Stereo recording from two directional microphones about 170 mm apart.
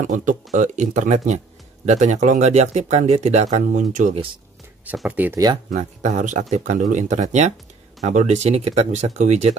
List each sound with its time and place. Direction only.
0.0 s speech: 50° right (ahead or behind)
4.8 s speech: 10° right (ahead or behind)
5.7 s speech: 45° right (ahead or behind)